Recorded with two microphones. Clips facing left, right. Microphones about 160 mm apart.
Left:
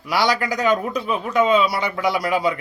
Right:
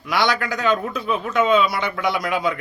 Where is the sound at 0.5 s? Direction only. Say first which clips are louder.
Left 2 dB; 15° left (ahead or behind).